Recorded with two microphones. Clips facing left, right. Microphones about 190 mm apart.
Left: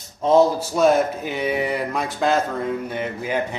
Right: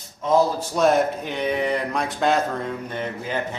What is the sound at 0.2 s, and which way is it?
Speech, 25° left (ahead or behind).